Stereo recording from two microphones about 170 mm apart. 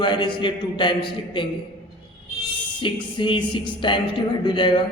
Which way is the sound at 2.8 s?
30° left (ahead or behind).